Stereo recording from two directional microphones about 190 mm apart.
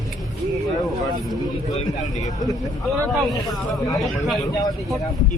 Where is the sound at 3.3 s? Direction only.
20° left (ahead or behind).